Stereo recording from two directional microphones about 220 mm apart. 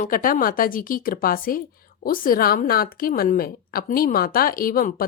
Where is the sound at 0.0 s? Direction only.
40° left (ahead or behind).